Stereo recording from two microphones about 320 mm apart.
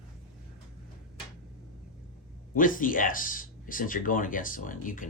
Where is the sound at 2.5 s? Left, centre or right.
Left.